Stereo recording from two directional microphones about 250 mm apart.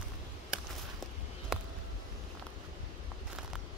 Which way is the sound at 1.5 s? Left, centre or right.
Centre.